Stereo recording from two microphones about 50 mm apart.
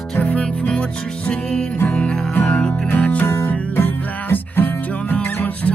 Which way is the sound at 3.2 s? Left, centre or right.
Left.